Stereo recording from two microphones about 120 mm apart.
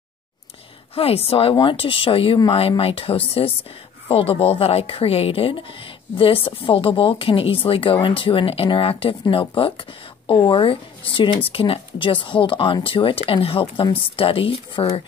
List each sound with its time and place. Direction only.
0.9 s a woman's voice: 55° left (ahead or behind)
1.5 s a woman's voice: 45° left (ahead or behind)